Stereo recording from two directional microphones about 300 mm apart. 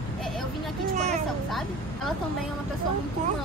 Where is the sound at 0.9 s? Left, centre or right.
Right.